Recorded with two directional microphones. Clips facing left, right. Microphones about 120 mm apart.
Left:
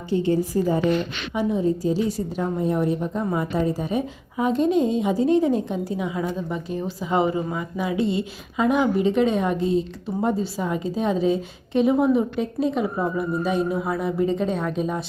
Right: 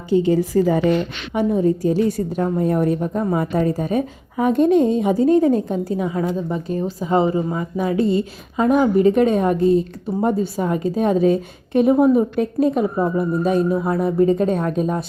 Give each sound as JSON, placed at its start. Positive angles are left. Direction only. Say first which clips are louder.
{"t": 0.3, "sound": "a woman's voice", "louder": "right 4 dB", "side_deg": -90}
{"t": 1.3, "sound": "a woman's voice", "louder": "right 5 dB", "side_deg": -50}
{"t": 13.0, "sound": "a woman's voice", "louder": "right 5 dB", "side_deg": -45}